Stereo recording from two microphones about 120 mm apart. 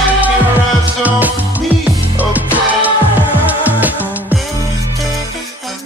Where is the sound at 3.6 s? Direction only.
15° right (ahead or behind).